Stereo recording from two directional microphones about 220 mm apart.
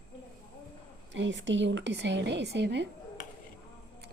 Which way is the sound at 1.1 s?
55° right (ahead or behind).